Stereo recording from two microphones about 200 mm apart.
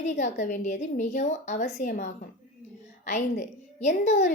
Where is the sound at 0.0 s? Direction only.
40° left (ahead or behind).